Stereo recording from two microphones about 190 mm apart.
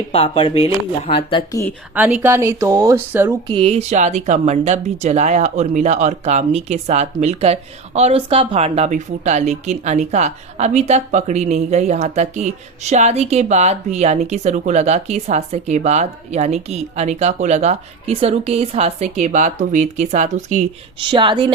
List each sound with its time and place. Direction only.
0.1 s speech: 30° left (ahead or behind)
2.0 s speech: 10° right (ahead or behind)
3.5 s speech: 30° right (ahead or behind)
21.0 s a woman's voice: 25° right (ahead or behind)